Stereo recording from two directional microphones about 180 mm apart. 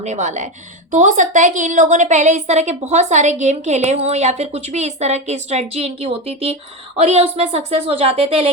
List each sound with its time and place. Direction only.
0.0 s a woman's voice: 40° right (ahead or behind)